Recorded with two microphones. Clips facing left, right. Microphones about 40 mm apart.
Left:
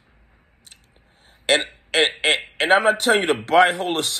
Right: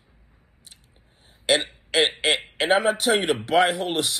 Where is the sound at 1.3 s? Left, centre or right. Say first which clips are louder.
Left 2 dB; left.